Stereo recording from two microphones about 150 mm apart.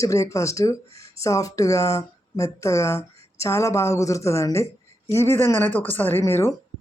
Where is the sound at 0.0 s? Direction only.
20° left (ahead or behind).